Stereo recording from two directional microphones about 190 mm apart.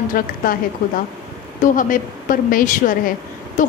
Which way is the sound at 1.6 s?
45° left (ahead or behind).